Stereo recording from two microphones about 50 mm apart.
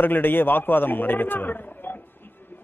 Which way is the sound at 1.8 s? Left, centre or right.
Left.